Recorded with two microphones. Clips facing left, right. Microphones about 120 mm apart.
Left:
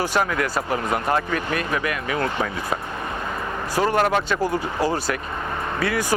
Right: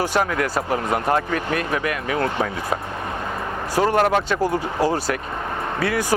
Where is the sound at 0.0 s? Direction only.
50° right (ahead or behind).